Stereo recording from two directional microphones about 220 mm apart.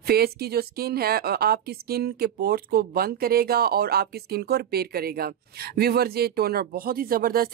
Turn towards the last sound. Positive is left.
turn(degrees=-40)  # may be behind; listen again after turning